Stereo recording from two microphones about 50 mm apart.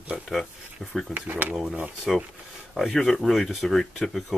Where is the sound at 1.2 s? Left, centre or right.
Right.